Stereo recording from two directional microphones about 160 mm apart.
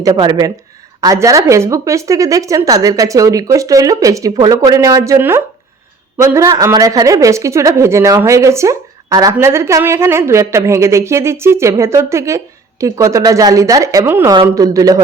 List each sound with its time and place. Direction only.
0.0 s a woman's voice: 25° right (ahead or behind)